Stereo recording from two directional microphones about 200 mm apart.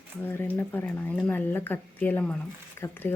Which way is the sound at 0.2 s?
10° left (ahead or behind).